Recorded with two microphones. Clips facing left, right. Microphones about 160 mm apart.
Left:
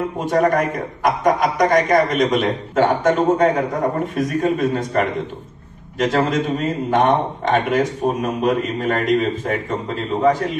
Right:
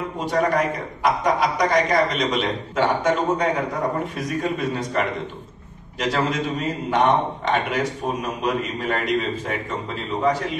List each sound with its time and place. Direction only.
0.2 s a man's voice: 45° left (ahead or behind)